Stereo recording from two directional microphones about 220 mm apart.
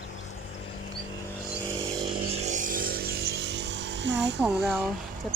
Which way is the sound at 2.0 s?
30° right (ahead or behind).